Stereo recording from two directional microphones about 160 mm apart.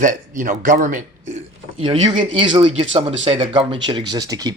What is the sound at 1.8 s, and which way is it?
Speech, 35° right (ahead or behind).